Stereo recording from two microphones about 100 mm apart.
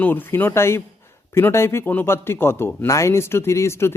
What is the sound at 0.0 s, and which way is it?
Speech, 20° left (ahead or behind).